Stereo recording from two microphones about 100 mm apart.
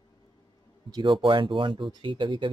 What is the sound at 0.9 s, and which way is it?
Speech, 50° right (ahead or behind).